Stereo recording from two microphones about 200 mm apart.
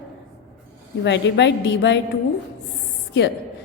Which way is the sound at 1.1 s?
60° left (ahead or behind).